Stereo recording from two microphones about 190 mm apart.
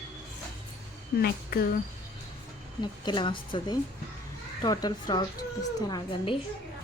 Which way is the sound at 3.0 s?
25° left (ahead or behind).